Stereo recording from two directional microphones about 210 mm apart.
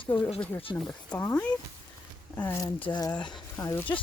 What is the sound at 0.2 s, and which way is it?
Speech, 25° left (ahead or behind).